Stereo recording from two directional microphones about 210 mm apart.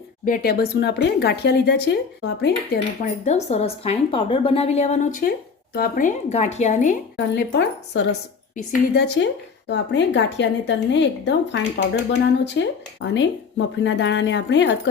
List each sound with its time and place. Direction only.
0.3 s speech: 45° left (ahead or behind)
3.0 s speech: 30° left (ahead or behind)
7.3 s a woman's voice: 55° left (ahead or behind)